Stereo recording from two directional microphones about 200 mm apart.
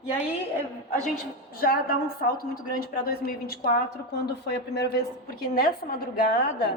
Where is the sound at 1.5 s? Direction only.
50° left (ahead or behind).